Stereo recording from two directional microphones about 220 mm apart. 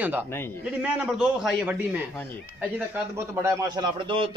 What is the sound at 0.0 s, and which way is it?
A man's voice, 10° right (ahead or behind).